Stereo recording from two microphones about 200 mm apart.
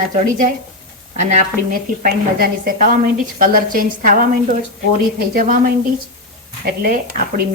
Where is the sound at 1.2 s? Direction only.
40° right (ahead or behind).